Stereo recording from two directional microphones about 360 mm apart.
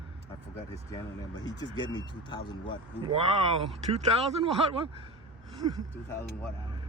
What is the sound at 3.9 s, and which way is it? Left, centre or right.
Speech, centre.